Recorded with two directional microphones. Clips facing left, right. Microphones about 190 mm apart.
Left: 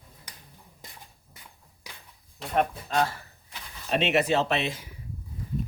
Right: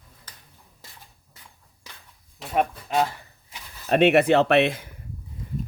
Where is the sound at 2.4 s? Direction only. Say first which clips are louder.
Right 2 dB; centre (ahead or behind).